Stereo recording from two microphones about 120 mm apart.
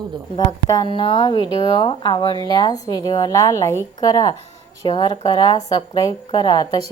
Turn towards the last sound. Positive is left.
turn(degrees=35)  # may be behind; listen again after turning